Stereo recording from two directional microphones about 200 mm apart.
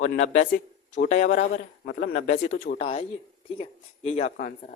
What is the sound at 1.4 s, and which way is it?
Speech, 55° left (ahead or behind).